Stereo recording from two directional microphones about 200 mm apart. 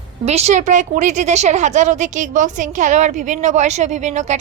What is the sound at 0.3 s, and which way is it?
A woman's voice, 35° right (ahead or behind).